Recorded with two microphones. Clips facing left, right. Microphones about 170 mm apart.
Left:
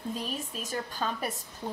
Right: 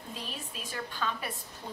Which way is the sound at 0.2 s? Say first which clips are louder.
Left 6 dB; 45° left (ahead or behind).